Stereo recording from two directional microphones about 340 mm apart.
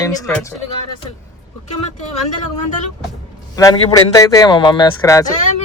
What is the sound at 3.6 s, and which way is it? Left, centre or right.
Speech, centre.